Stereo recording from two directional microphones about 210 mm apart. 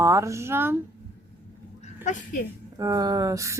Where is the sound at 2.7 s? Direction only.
15° right (ahead or behind).